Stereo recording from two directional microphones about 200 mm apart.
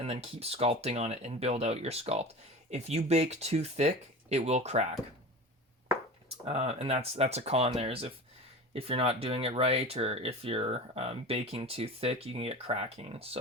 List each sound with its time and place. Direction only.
0.0 s speech: 30° right (ahead or behind)
6.2 s speech: 30° right (ahead or behind)